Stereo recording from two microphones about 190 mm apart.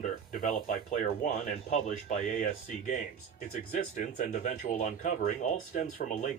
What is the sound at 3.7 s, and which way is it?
Speech, 45° left (ahead or behind).